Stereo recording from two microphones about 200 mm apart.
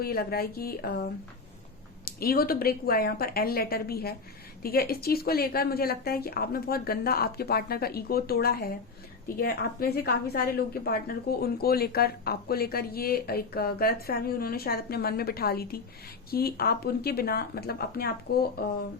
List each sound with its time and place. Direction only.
0.0 s a woman's voice: 50° left (ahead or behind)
2.0 s a woman's voice: 50° left (ahead or behind)